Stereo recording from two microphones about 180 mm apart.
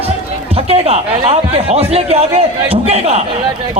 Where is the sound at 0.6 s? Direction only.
35° right (ahead or behind).